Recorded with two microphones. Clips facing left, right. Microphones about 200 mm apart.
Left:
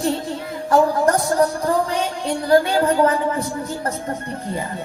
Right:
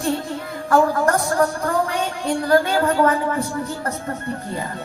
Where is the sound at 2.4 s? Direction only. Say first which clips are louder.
Left 2 dB; 20° left (ahead or behind).